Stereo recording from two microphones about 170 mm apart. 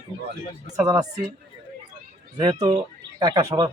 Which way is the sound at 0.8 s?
20° right (ahead or behind).